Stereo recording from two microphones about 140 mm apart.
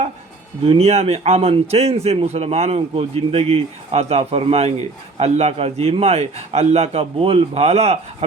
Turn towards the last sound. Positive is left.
turn(degrees=-50)  # may be behind; listen again after turning